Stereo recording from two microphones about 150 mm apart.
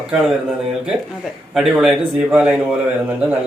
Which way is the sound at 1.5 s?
Centre (ahead or behind).